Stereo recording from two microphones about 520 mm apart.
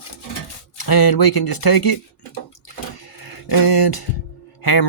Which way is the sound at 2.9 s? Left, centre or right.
Left.